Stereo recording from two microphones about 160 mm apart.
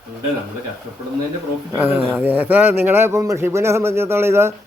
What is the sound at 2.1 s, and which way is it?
A man's voice, 10° right (ahead or behind).